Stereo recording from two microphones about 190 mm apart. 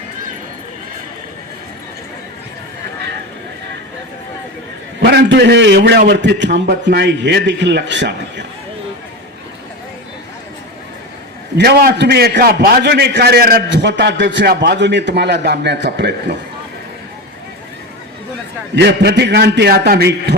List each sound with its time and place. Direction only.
5.0 s a man's voice: 60° right (ahead or behind)
11.5 s a man's voice: 55° right (ahead or behind)
18.7 s a man's voice: 65° right (ahead or behind)